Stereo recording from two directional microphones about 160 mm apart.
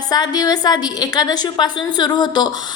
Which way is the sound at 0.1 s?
25° left (ahead or behind).